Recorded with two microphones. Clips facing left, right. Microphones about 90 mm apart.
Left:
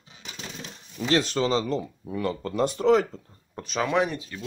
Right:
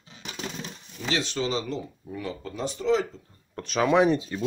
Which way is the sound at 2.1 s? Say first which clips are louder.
Left 7 dB; 65° left (ahead or behind).